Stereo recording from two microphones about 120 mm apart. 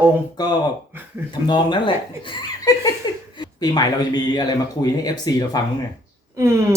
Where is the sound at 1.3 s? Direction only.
40° left (ahead or behind).